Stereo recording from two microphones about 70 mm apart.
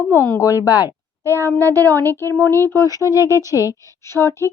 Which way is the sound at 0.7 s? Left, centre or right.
Left.